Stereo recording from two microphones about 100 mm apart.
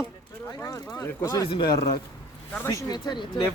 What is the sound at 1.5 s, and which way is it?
Speech, 40° left (ahead or behind).